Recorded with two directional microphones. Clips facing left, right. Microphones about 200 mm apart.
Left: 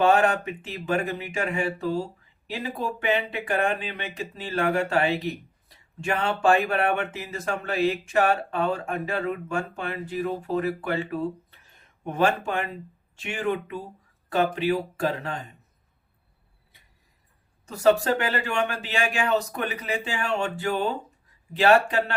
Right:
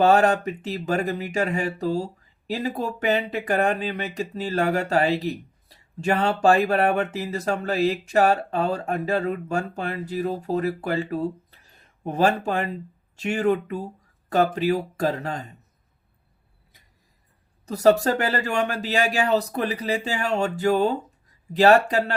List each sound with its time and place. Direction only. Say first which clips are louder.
0.0 s speech: right 3 dB; 40° right (ahead or behind)
17.7 s speech: right 2 dB; 40° right (ahead or behind)